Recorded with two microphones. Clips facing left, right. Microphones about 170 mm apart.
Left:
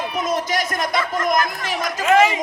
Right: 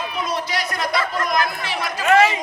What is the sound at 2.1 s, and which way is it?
Speech, 20° left (ahead or behind).